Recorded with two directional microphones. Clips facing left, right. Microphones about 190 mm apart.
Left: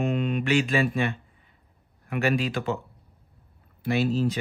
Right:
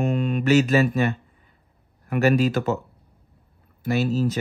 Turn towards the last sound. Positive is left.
turn(degrees=-45)  # may be behind; listen again after turning